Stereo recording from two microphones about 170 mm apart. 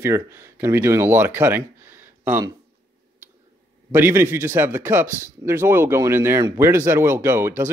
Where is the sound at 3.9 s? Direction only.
10° right (ahead or behind).